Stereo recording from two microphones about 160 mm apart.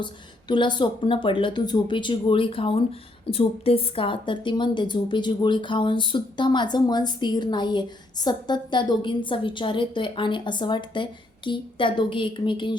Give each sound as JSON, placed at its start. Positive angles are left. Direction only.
{"t": 0.0, "sound": "a woman's voice", "side_deg": 30}